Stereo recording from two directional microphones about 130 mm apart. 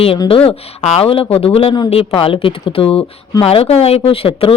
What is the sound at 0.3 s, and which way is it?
Speech, 50° left (ahead or behind).